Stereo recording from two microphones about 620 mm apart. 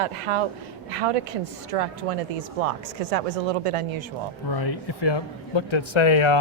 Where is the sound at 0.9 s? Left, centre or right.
Right.